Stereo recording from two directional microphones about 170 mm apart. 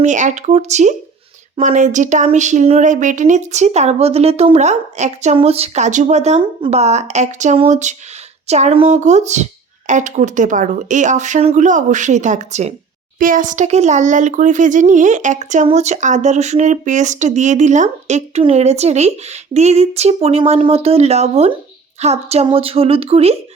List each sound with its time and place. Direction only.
0.0 s a child's voice: 45° right (ahead or behind)
13.1 s a child's voice: 55° right (ahead or behind); by 23.4 s 35° right (ahead or behind)